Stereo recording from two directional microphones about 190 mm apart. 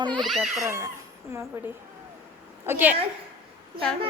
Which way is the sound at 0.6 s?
15° right (ahead or behind).